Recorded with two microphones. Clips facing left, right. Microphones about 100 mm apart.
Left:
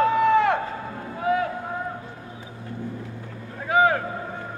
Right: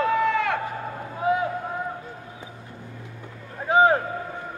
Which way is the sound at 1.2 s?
20° right (ahead or behind).